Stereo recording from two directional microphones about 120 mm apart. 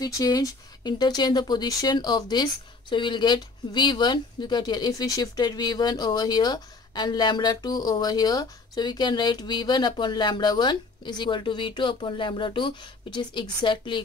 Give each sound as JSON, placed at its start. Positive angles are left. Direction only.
{"t": 0.0, "sound": "speech", "side_deg": 35}